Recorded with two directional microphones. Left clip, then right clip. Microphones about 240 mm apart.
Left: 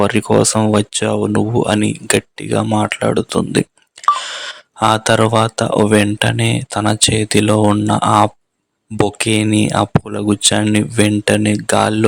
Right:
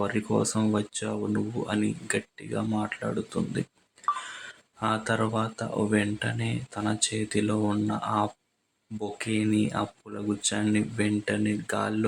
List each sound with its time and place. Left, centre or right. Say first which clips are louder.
0.0 s speech: left 14 dB; left